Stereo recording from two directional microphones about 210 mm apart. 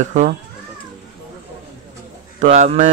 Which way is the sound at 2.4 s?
35° right (ahead or behind).